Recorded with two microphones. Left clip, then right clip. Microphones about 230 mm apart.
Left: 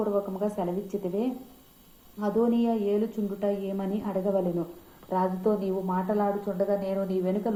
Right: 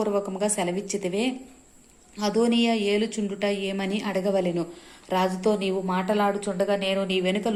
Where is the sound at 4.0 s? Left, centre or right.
Right.